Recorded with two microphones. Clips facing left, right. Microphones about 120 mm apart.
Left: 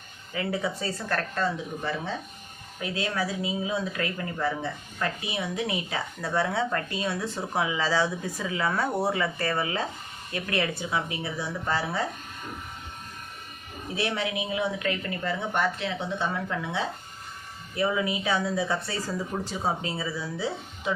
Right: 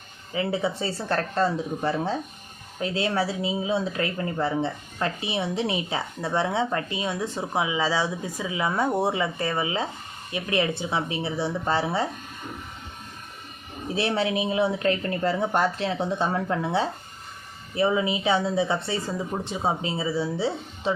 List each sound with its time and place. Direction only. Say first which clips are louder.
0.3 s speech: right 3 dB; 25° right (ahead or behind)
13.9 s a woman's voice: right 5 dB; 30° right (ahead or behind)